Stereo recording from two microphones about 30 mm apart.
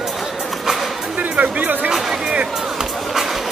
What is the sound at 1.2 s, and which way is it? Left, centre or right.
Speech, right.